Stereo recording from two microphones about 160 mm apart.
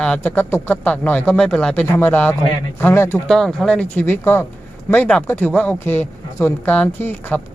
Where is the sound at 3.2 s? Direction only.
Centre (ahead or behind).